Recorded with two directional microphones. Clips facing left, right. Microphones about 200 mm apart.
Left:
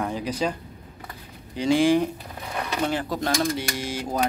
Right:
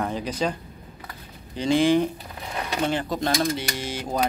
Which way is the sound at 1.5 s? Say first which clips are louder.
Even; 10° left (ahead or behind).